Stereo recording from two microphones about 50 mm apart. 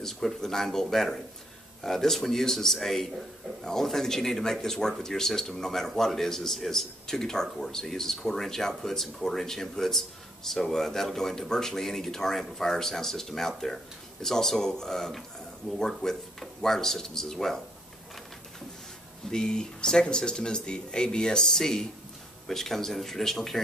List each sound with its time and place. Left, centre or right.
0.0 s a man's voice: centre
19.3 s a man's voice: centre